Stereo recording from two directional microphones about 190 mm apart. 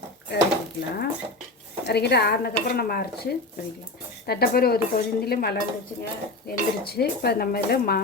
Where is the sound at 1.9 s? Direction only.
60° left (ahead or behind).